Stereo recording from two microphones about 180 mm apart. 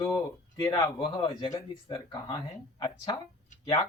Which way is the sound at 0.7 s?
25° left (ahead or behind).